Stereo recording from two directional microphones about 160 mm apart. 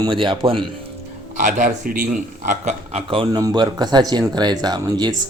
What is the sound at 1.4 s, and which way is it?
A man's voice, 50° right (ahead or behind).